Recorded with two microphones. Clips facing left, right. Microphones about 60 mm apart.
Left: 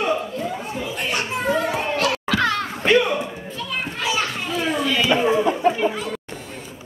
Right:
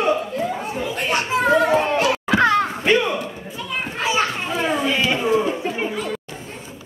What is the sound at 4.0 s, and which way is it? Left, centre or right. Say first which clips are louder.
Children playing: right 4 dB; right.